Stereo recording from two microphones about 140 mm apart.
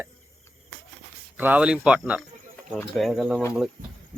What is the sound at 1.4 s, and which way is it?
A man's voice, 10° right (ahead or behind).